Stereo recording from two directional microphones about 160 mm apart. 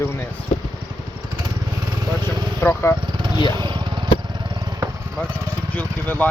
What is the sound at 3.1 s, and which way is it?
Vehicle, 30° right (ahead or behind).